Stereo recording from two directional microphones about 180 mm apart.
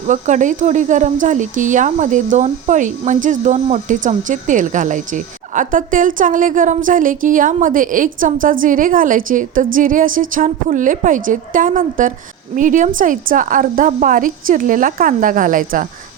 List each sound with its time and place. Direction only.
0.1 s speech: 45° right (ahead or behind)